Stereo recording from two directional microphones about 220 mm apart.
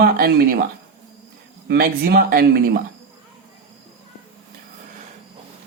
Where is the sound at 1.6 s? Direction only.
45° right (ahead or behind).